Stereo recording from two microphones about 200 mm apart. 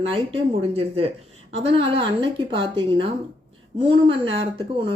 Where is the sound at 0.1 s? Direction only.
30° right (ahead or behind).